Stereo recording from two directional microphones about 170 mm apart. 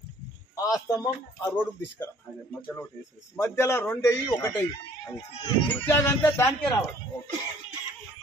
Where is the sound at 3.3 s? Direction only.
15° left (ahead or behind).